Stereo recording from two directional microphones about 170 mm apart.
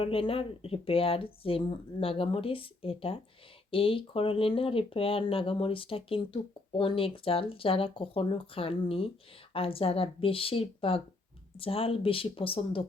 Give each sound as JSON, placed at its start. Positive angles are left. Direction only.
{"t": 0.0, "sound": "speech", "side_deg": 35}